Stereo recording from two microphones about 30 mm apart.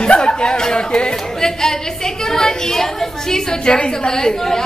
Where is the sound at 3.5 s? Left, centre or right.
Left.